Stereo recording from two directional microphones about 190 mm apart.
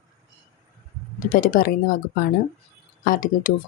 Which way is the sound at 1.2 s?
45° left (ahead or behind).